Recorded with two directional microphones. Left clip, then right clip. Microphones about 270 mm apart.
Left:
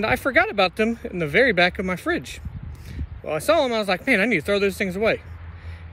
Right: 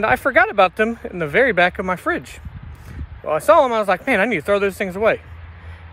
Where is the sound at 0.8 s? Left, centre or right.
Centre.